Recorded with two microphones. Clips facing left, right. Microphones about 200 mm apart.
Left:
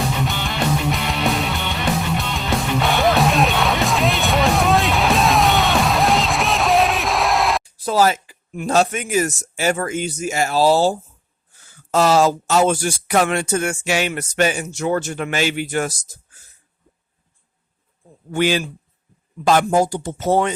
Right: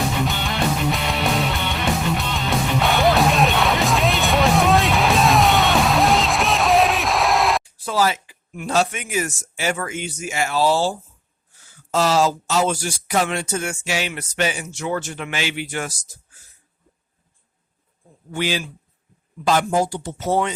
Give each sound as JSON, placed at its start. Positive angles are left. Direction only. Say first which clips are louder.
{"t": 0.3, "sound": "music", "louder": "left 1 dB", "side_deg": 0}
{"t": 7.6, "sound": "speech", "louder": "left 4 dB", "side_deg": 40}
{"t": 11.9, "sound": "speech", "louder": "left 3 dB", "side_deg": 55}
{"t": 18.3, "sound": "speech", "louder": "left 5 dB", "side_deg": 50}